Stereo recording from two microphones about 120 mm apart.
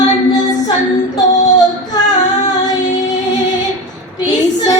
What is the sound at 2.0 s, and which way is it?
Female singing, 35° left (ahead or behind).